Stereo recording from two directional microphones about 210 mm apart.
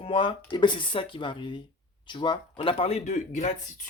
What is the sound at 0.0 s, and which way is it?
Speech, 25° left (ahead or behind).